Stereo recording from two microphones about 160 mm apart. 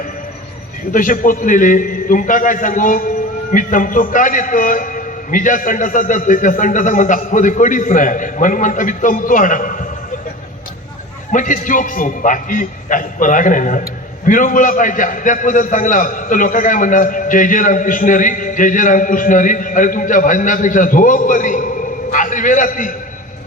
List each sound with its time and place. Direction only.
0.9 s a man's voice: 55° left (ahead or behind)
11.3 s a man's voice: 55° left (ahead or behind)